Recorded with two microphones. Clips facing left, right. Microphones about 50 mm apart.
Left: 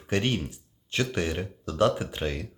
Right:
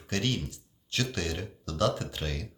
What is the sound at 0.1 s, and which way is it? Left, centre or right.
Speech, left.